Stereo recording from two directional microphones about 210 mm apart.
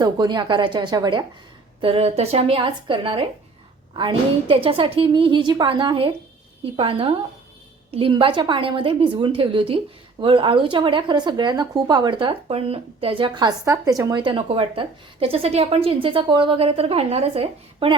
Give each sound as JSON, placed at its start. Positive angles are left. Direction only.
{"t": 0.0, "sound": "a woman's voice", "side_deg": -20}